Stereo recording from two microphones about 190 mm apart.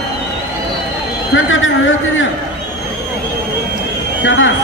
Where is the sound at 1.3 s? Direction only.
90° left.